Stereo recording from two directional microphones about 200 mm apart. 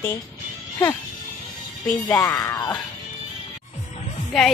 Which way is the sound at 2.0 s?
10° left (ahead or behind).